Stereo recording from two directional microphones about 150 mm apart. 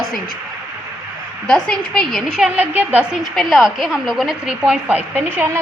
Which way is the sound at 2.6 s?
10° right (ahead or behind).